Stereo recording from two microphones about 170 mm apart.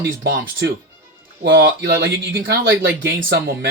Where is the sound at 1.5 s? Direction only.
90° right.